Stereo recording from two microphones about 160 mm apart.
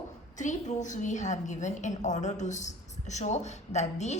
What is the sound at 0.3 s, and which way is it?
A woman's voice, 50° left (ahead or behind).